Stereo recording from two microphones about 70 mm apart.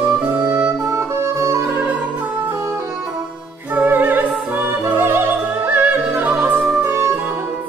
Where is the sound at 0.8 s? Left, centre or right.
Right.